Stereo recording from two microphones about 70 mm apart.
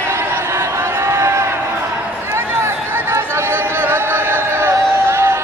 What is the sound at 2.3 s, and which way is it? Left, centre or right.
Chatter, right.